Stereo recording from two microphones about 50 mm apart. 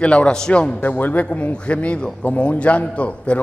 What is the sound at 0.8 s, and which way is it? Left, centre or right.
A man's voice, left.